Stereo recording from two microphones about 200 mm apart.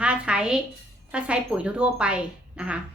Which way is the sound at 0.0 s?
5° right (ahead or behind).